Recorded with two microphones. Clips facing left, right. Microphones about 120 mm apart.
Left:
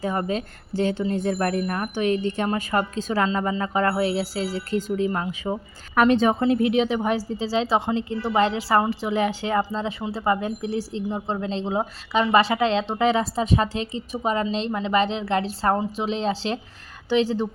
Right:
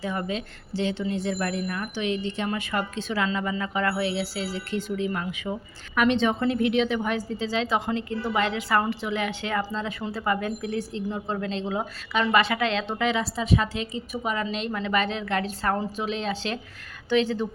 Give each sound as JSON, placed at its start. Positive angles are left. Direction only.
{"t": 0.0, "sound": "a woman's voice", "side_deg": 45}